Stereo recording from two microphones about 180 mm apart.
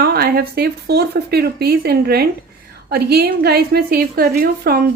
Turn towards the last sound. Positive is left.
turn(degrees=-55)  # may be behind; listen again after turning